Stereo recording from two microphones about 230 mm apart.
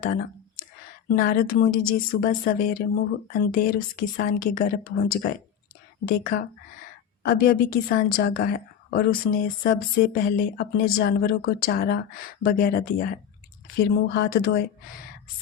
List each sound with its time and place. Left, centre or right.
0.0 s a sound: left
1.1 s speech: left
10.8 s speech: left
11.2 s speech: left